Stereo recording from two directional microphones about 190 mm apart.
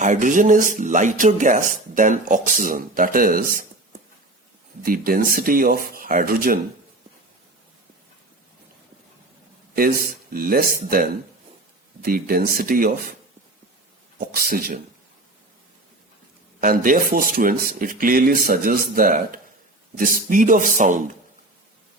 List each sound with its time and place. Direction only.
0.0 s speech: 40° right (ahead or behind)
4.8 s speech: 50° right (ahead or behind)
9.7 s speech: 50° right (ahead or behind)
14.2 s speech: 50° right (ahead or behind)
16.6 s speech: 45° right (ahead or behind)